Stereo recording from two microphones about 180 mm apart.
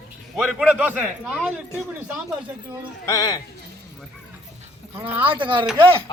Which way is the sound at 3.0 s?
20° left (ahead or behind).